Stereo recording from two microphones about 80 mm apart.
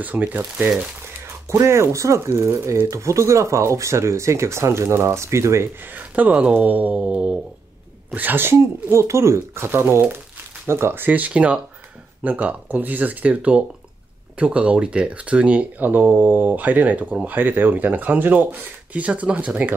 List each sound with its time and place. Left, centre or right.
0.0 s speech: centre
1.5 s speech: right
5.9 s speech: right